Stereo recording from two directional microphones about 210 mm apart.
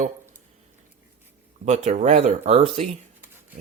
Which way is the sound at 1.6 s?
30° right (ahead or behind).